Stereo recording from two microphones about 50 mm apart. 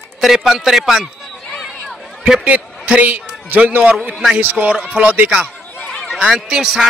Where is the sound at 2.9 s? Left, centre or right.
Right.